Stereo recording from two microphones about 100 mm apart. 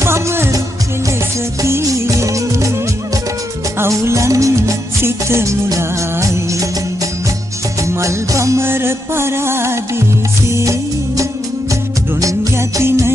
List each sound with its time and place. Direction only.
0.0 s music: 25° right (ahead or behind)
1.6 s music: 30° right (ahead or behind)
3.8 s music: 30° right (ahead or behind)
7.8 s music: 30° right (ahead or behind)